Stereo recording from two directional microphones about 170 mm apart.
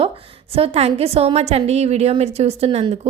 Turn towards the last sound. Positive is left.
turn(degrees=-35)  # may be behind; listen again after turning